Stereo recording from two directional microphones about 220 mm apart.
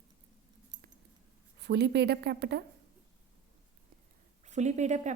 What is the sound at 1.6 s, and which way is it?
A woman's voice, 50° right (ahead or behind).